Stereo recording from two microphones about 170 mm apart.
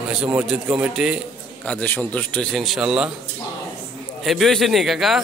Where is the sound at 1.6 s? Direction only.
10° left (ahead or behind).